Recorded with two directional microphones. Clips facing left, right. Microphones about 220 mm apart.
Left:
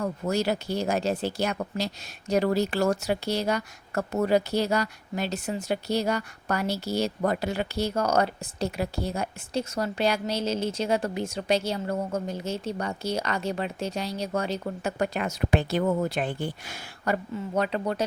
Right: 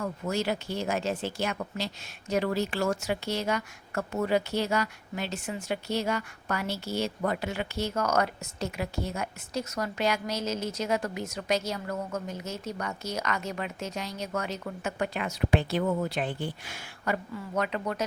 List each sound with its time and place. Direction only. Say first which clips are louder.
0.0 s speech: left 4 dB; 40° left (ahead or behind)
17.3 s speech: left 4 dB; 30° left (ahead or behind)